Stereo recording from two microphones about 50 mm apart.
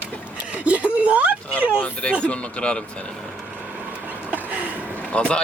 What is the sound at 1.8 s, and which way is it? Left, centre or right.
Speech, left.